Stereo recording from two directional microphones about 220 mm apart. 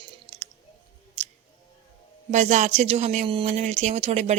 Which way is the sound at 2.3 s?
35° right (ahead or behind).